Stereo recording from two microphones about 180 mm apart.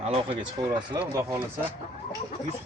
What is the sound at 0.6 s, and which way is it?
Speech, 25° right (ahead or behind).